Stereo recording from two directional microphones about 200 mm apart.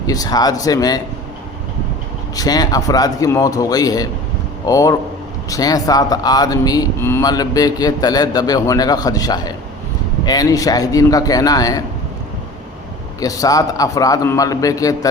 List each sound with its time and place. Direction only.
0.1 s a man's voice: 20° left (ahead or behind)
2.3 s a man's voice: 20° left (ahead or behind)
13.1 s a man's voice: 15° left (ahead or behind)